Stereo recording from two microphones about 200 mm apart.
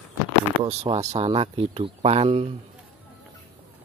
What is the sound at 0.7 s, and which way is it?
Speech, 30° right (ahead or behind).